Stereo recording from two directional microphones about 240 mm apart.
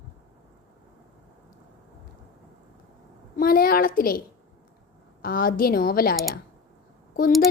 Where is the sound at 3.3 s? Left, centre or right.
Left.